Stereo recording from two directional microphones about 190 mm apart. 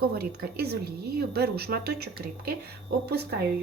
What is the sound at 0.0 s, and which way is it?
A woman's voice, 55° right (ahead or behind).